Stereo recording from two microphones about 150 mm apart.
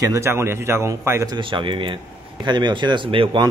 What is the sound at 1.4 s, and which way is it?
Speech, 35° right (ahead or behind).